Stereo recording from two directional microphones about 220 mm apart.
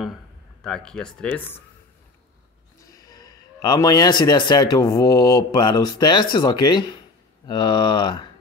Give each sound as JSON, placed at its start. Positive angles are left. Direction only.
{"t": 0.7, "sound": "speech", "side_deg": 5}
{"t": 2.8, "sound": "a man's voice", "side_deg": 15}